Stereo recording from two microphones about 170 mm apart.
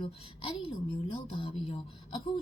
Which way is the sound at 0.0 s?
30° left (ahead or behind).